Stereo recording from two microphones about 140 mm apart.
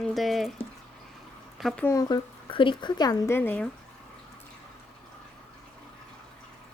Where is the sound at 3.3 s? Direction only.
15° left (ahead or behind).